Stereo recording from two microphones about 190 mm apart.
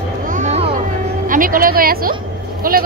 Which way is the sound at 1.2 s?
45° right (ahead or behind).